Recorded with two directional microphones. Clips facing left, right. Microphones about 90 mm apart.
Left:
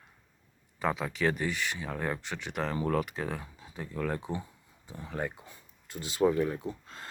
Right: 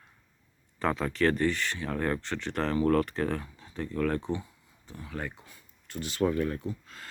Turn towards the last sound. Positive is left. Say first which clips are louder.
# left 1 dB
turn(degrees=15)  # may be behind; listen again after turning